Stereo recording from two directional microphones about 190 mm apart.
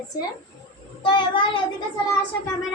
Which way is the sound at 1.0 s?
25° left (ahead or behind).